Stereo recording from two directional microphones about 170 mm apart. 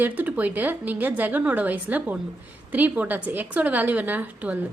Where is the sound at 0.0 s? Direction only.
10° right (ahead or behind).